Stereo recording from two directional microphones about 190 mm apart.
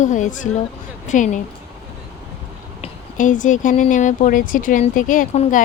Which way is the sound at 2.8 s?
40° left (ahead or behind).